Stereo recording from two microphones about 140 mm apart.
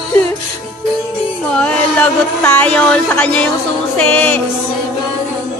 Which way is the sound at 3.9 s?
10° left (ahead or behind).